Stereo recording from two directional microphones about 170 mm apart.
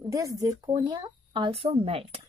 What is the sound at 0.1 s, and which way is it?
Speech, 20° right (ahead or behind).